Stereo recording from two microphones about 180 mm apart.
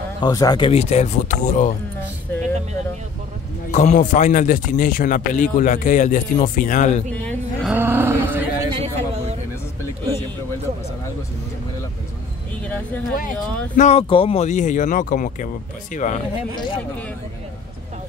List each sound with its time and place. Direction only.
0.2 s speech: 20° left (ahead or behind); by 1.7 s 45° left (ahead or behind)
3.7 s a man's voice: 40° left (ahead or behind)
7.1 s music: 5° left (ahead or behind)
7.7 s a sound: 10° right (ahead or behind)
8.7 s a sound: 35° right (ahead or behind)
13.7 s a man's voice: 35° left (ahead or behind)